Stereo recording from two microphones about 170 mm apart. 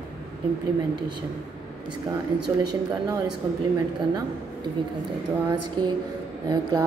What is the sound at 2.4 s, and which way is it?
Speech, 25° right (ahead or behind).